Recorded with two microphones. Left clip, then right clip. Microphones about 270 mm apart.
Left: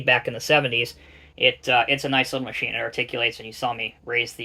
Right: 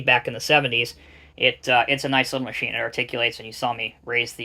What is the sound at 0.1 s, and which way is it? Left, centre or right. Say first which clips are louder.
Speech: right 1 dB; right.